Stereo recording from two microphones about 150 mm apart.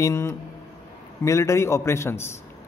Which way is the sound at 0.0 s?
20° left (ahead or behind).